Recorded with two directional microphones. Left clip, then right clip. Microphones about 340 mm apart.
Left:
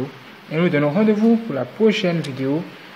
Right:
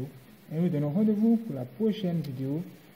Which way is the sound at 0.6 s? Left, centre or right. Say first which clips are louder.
Left 12 dB; centre.